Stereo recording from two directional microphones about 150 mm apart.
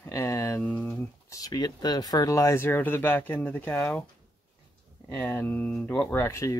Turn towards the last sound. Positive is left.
turn(degrees=20)  # may be behind; listen again after turning